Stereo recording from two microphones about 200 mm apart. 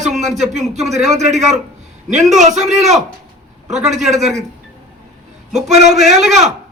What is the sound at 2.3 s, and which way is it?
Speech, 35° right (ahead or behind).